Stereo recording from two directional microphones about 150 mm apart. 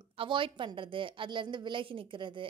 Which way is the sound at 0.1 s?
35° right (ahead or behind).